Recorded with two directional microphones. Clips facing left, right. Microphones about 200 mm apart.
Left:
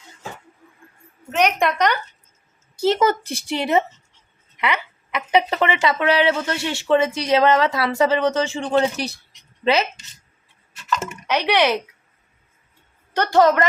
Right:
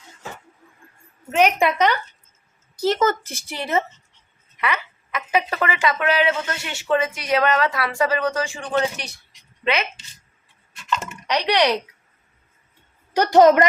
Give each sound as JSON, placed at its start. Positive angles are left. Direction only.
{"t": 1.3, "sound": "a woman's voice", "side_deg": -5}
{"t": 2.8, "sound": "a woman's voice", "side_deg": 15}
{"t": 5.3, "sound": "speech", "side_deg": 25}
{"t": 10.8, "sound": "drip", "side_deg": 5}
{"t": 13.1, "sound": "a woman's voice", "side_deg": -20}